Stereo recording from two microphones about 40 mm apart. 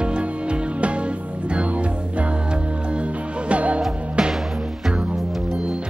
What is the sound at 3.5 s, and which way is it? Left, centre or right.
Music, right.